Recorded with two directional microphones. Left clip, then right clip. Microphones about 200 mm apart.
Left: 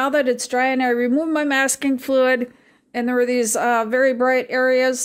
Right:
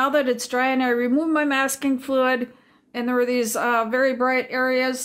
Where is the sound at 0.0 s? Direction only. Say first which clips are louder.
Left 2 dB; 25° left (ahead or behind).